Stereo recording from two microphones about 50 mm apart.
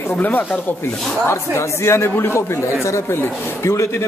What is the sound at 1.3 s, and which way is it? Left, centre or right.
Speech, left.